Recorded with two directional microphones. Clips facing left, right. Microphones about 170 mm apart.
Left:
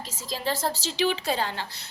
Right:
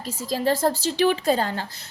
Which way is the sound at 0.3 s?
50° right (ahead or behind).